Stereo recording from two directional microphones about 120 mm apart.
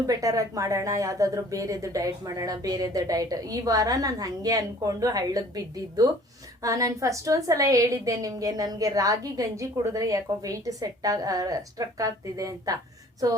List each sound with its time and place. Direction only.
0.1 s a woman's voice: 30° right (ahead or behind)